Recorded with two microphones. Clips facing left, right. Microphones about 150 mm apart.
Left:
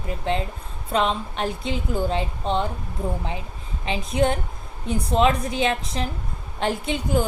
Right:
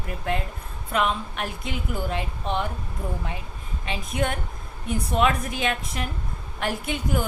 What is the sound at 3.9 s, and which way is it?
A woman's voice, 30° left (ahead or behind).